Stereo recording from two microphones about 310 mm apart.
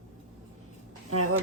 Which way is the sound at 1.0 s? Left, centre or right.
Right.